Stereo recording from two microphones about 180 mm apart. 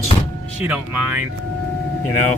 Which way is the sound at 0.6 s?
10° right (ahead or behind).